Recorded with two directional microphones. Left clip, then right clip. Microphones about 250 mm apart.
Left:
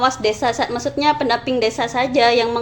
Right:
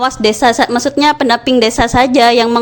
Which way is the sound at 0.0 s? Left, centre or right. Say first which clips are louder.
Right 6 dB; right.